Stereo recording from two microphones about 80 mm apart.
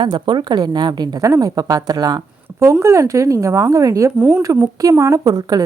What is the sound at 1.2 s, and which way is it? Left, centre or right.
Speech, right.